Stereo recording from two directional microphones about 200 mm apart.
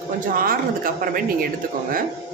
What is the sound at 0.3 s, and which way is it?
A woman's voice, 45° right (ahead or behind).